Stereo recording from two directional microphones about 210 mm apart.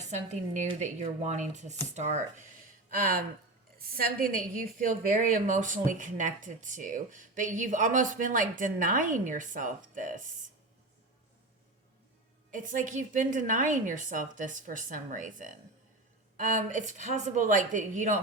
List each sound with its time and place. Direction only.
0.0 s a woman's voice: 35° right (ahead or behind)
12.5 s a woman's voice: 40° right (ahead or behind)